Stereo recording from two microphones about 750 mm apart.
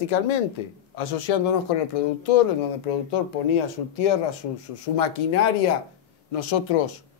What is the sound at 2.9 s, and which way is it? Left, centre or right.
Speech, left.